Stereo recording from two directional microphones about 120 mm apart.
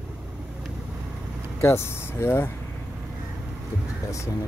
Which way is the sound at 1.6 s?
20° left (ahead or behind).